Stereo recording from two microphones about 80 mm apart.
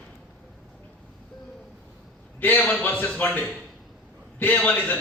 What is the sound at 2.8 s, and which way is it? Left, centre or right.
A man's voice, left.